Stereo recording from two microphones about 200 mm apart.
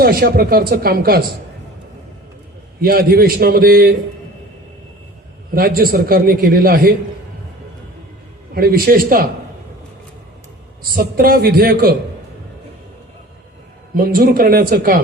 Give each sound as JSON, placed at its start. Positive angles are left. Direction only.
{"t": 0.0, "sound": "a man's voice", "side_deg": -50}
{"t": 2.8, "sound": "a man's voice", "side_deg": -50}
{"t": 5.5, "sound": "a man's voice", "side_deg": -50}
{"t": 8.5, "sound": "a man's voice", "side_deg": -50}
{"t": 10.8, "sound": "a man's voice", "side_deg": -50}
{"t": 13.9, "sound": "a man's voice", "side_deg": -45}